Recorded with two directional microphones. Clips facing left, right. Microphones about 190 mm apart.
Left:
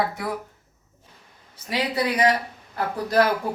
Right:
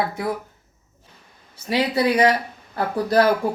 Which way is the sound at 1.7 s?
30° right (ahead or behind).